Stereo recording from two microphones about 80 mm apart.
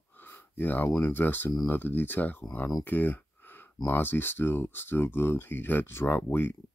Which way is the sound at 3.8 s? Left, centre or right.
Left.